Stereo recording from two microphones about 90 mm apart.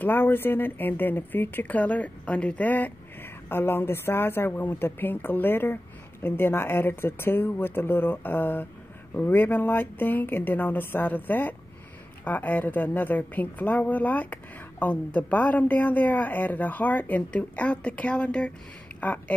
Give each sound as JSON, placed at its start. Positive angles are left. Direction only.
{"t": 0.0, "sound": "speech", "side_deg": 25}